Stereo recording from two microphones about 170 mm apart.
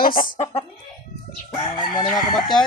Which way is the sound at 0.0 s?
55° left (ahead or behind).